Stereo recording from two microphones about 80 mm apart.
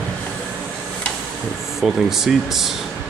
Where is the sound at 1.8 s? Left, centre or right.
Centre.